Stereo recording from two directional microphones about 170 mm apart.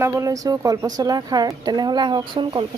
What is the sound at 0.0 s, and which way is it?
A woman's voice, 15° right (ahead or behind).